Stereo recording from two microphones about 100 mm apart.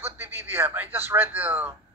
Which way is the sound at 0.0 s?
25° right (ahead or behind).